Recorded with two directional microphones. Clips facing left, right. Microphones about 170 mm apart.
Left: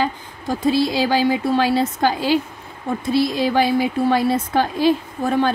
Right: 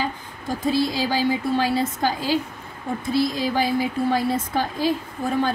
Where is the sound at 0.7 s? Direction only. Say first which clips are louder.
Left 4 dB; 75° left (ahead or behind).